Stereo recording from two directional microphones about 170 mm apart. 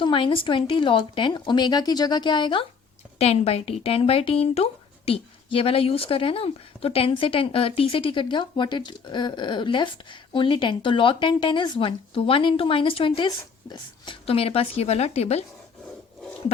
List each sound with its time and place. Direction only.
0.0 s a woman's voice: 30° left (ahead or behind)